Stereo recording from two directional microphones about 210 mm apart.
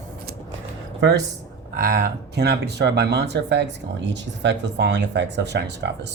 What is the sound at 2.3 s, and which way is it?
Speech, 50° right (ahead or behind).